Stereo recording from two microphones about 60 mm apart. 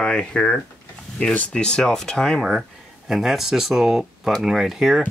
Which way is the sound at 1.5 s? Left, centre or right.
Centre.